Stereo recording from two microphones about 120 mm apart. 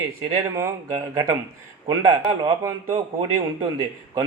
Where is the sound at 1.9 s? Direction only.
30° right (ahead or behind).